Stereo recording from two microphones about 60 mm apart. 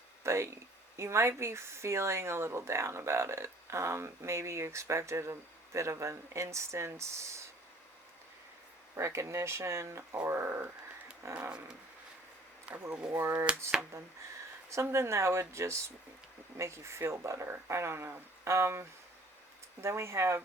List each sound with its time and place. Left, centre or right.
0.2 s speech: right
9.0 s speech: right
11.2 s speech: right
12.7 s speech: right
13.3 s speech: right
13.9 s speech: right